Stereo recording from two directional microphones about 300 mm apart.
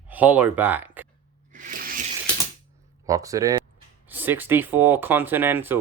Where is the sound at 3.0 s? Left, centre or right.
Centre.